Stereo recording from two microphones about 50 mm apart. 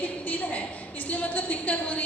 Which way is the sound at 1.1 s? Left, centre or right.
Left.